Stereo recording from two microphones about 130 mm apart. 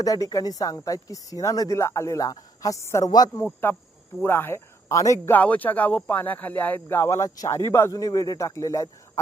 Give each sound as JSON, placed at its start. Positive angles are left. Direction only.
{"t": 0.0, "sound": "a man's voice", "side_deg": 30}
{"t": 3.4, "sound": "a man's voice", "side_deg": 15}